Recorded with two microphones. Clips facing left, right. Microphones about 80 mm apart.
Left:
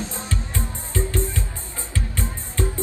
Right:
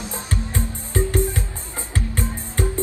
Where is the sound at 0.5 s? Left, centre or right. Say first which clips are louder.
Right 4 dB; right.